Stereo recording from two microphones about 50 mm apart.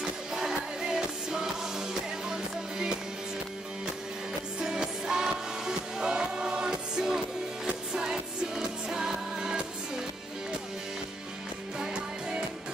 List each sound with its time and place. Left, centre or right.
0.3 s music: centre
4.6 s music: centre
11.8 s music: centre